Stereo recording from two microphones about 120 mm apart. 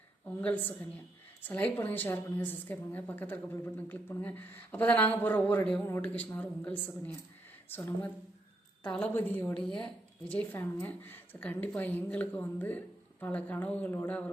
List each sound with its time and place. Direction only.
0.3 s a woman's voice: 15° left (ahead or behind)